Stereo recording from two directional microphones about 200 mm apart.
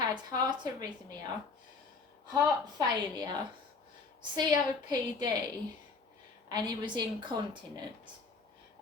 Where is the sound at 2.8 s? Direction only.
20° right (ahead or behind).